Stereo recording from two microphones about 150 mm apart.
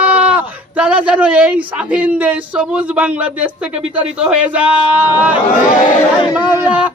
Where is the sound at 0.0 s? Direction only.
10° right (ahead or behind).